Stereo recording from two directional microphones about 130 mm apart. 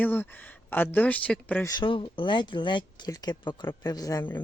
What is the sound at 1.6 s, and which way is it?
Speech, 35° left (ahead or behind).